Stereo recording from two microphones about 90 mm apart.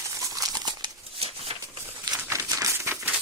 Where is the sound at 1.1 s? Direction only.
90° right.